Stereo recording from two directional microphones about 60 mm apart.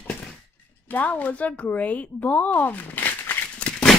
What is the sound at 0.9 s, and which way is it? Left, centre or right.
Speech, left.